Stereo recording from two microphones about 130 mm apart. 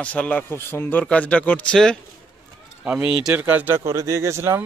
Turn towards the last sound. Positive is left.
turn(degrees=-20)  # may be behind; listen again after turning